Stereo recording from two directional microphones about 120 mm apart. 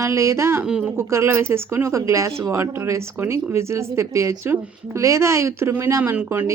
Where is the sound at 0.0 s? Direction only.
25° right (ahead or behind).